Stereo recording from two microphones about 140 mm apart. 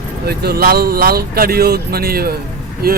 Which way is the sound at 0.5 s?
90° right.